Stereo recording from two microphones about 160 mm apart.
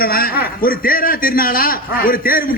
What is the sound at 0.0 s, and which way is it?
A man's voice, 70° left (ahead or behind).